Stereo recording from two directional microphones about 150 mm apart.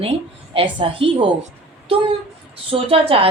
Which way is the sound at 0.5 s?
35° right (ahead or behind).